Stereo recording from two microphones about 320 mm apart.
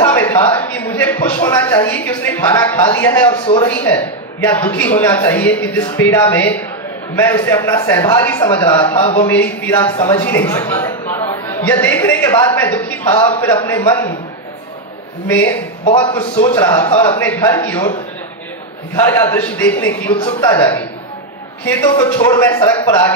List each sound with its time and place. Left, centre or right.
0.0 s a man's voice: centre
8.6 s a man's voice: centre
9.3 s a man's voice: centre
15.2 s a man's voice: centre
15.8 s a man's voice: centre
16.5 s a man's voice: centre